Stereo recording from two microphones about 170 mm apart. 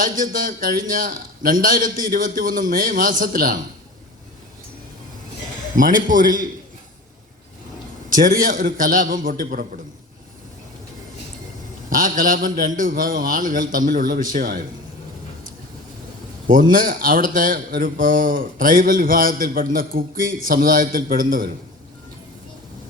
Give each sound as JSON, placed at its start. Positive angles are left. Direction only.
{"t": 0.0, "sound": "a man's voice", "side_deg": -55}
{"t": 5.7, "sound": "a man's voice", "side_deg": -50}
{"t": 8.1, "sound": "a man's voice", "side_deg": -55}
{"t": 11.9, "sound": "a man's voice", "side_deg": -50}
{"t": 16.5, "sound": "speech", "side_deg": -55}